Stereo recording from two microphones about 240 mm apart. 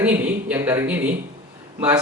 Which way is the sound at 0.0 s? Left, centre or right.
Centre.